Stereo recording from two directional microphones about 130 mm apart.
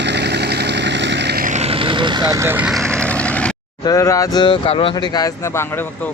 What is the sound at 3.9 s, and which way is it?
Speech, 25° left (ahead or behind).